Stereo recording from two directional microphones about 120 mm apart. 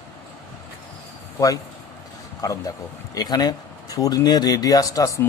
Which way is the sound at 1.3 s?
30° left (ahead or behind).